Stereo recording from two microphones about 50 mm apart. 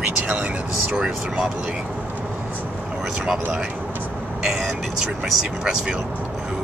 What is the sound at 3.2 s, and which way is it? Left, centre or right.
Speech, centre.